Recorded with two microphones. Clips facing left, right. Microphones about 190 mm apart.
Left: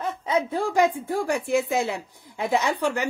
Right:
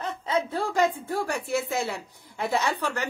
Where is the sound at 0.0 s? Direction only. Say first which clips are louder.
Left 3 dB; 10° left (ahead or behind).